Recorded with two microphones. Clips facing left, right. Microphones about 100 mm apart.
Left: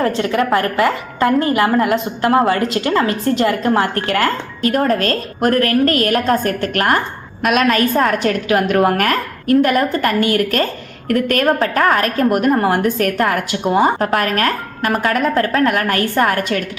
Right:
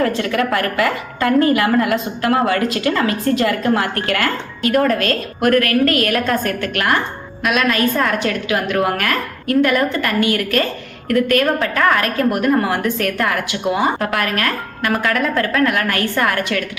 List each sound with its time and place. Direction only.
0.0 s a woman's voice: 30° left (ahead or behind)